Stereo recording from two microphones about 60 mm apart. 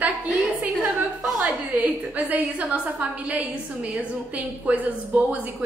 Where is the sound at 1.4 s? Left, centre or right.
Right.